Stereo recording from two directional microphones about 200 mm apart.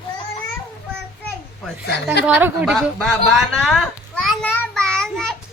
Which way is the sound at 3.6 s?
Centre (ahead or behind).